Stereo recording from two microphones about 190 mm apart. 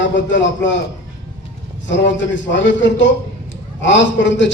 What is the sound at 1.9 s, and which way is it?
A man's voice, 70° left (ahead or behind).